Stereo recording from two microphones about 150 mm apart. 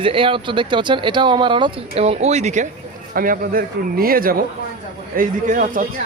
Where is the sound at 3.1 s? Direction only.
70° right (ahead or behind).